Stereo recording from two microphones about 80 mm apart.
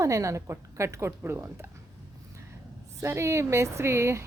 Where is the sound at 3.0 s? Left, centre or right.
Right.